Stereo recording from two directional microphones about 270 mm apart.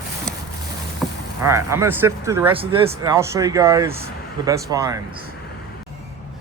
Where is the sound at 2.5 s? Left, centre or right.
Centre.